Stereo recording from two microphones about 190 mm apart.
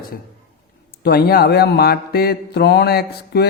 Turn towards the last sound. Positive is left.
turn(degrees=55)  # may be behind; listen again after turning